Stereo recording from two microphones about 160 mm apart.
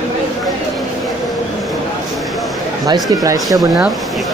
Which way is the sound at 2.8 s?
20° right (ahead or behind).